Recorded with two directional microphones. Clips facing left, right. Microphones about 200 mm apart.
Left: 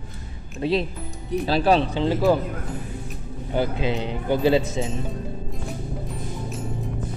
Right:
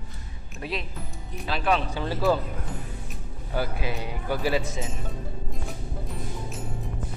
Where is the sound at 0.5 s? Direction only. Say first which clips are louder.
Left 10 dB; 25° left (ahead or behind).